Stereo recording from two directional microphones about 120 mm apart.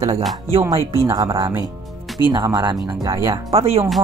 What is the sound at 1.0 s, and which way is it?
Speech, 25° right (ahead or behind).